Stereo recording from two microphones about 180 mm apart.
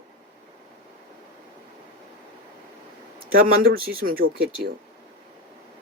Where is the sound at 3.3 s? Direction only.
55° right (ahead or behind).